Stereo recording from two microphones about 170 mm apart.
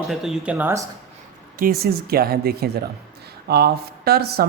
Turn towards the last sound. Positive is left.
turn(degrees=-65)  # may be behind; listen again after turning